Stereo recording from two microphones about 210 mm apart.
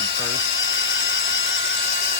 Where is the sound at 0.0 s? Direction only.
60° left (ahead or behind).